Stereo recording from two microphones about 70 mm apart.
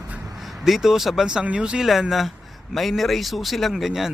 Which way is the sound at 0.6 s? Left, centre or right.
Centre.